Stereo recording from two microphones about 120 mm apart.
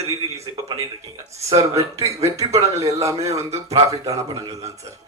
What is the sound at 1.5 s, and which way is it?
Speech, 25° right (ahead or behind).